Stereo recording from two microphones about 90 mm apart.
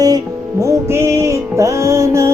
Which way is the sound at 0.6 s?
30° right (ahead or behind).